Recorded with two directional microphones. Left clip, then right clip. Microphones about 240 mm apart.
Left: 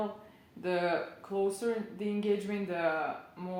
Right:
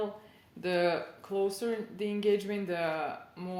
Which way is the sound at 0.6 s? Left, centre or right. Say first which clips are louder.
Right 2 dB; right.